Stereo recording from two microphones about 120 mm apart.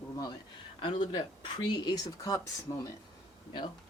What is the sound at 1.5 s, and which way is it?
Speech, 35° left (ahead or behind).